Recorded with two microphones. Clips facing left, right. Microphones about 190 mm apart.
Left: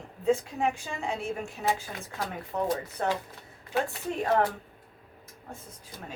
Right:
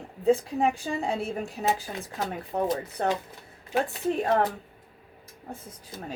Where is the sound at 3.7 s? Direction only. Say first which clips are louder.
Right 2 dB; 20° right (ahead or behind).